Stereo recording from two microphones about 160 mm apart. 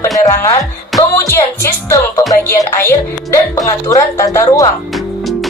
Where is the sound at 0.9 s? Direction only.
20° left (ahead or behind).